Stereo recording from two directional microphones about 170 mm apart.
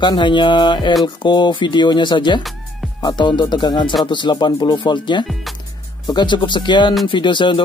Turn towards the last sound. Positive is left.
turn(degrees=30)  # may be behind; listen again after turning